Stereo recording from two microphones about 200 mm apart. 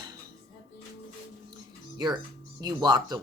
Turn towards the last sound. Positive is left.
turn(degrees=-20)  # may be behind; listen again after turning